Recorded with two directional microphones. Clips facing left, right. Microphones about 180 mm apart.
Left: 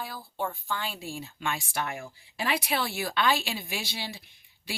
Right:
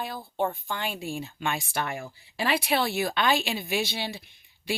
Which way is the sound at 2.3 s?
30° right (ahead or behind).